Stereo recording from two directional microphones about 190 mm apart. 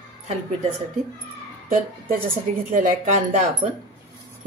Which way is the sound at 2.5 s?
40° right (ahead or behind).